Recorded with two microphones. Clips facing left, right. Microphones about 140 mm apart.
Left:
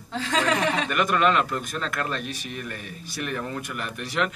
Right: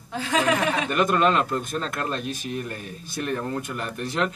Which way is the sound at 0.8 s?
30° right (ahead or behind).